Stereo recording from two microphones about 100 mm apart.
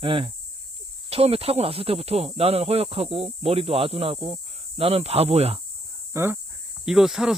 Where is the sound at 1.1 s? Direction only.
80° right.